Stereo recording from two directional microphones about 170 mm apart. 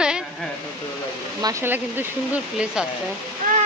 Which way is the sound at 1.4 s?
20° right (ahead or behind).